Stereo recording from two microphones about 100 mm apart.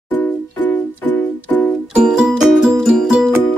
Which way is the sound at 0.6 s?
15° left (ahead or behind).